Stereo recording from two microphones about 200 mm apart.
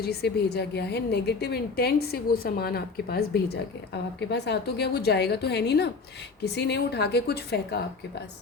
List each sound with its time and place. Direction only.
0.0 s a woman's voice: 55° left (ahead or behind)